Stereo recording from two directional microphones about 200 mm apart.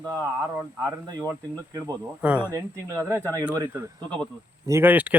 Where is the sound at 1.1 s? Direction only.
15° right (ahead or behind).